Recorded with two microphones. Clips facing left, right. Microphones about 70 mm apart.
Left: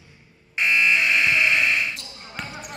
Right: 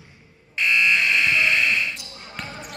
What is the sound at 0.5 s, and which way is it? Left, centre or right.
Fire alarm, left.